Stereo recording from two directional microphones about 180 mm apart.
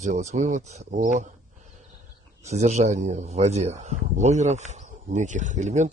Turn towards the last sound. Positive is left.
turn(degrees=-40)  # may be behind; listen again after turning